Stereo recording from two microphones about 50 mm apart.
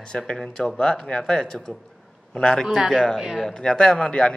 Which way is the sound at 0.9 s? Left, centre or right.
Centre.